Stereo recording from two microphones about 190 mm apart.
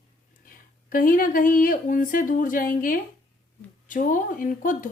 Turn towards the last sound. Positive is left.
turn(degrees=45)  # may be behind; listen again after turning